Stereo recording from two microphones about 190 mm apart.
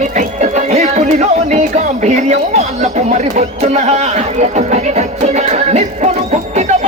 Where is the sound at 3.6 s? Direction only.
35° right (ahead or behind).